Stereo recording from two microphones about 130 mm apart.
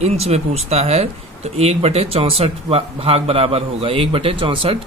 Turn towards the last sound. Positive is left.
turn(degrees=-40)  # may be behind; listen again after turning